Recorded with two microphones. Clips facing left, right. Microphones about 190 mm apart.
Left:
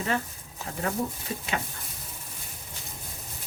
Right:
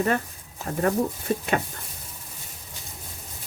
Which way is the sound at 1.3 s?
50° right (ahead or behind).